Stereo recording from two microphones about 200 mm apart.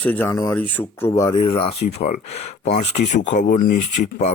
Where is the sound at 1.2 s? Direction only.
20° left (ahead or behind).